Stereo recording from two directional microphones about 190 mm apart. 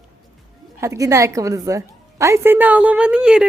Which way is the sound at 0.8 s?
15° right (ahead or behind).